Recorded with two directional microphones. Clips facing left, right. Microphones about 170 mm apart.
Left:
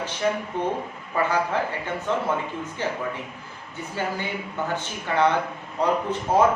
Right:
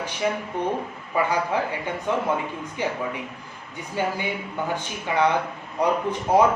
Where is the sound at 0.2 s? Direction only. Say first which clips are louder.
Even; 10° right (ahead or behind).